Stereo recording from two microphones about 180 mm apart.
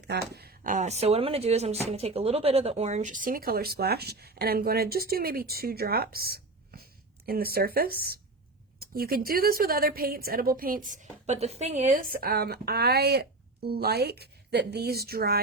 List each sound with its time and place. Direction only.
0.0 s a woman's voice: 65° right (ahead or behind); by 12.1 s 45° right (ahead or behind)
12.2 s speech: 60° right (ahead or behind)